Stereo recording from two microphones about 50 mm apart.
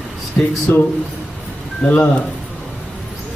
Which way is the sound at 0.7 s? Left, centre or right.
Left.